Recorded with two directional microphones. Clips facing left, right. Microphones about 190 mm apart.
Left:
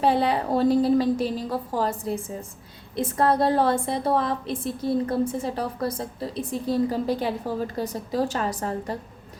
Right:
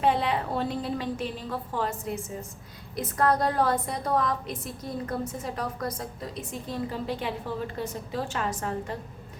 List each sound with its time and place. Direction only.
0.0 s a woman's voice: 35° left (ahead or behind)